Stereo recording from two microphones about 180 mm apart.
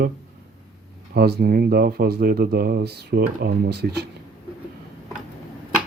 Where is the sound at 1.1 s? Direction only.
60° right (ahead or behind).